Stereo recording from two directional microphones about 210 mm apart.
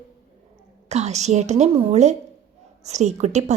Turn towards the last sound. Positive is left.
turn(degrees=-30)  # may be behind; listen again after turning